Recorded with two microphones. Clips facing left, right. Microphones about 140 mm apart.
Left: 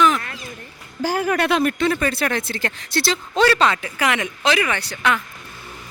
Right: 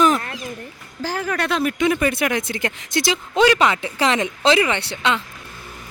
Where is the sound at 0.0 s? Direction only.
35° right (ahead or behind).